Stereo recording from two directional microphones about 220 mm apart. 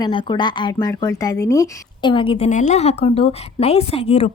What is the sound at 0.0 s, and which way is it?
Speech, 20° left (ahead or behind).